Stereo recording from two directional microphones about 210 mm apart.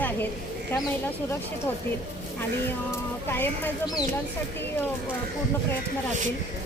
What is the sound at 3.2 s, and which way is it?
Speech, 10° left (ahead or behind).